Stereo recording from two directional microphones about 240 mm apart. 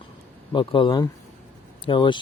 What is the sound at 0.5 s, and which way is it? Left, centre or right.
Speech, left.